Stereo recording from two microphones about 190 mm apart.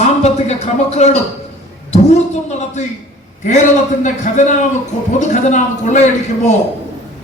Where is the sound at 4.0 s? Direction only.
40° left (ahead or behind).